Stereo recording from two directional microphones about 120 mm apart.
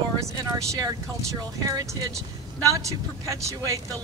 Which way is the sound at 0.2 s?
25° right (ahead or behind).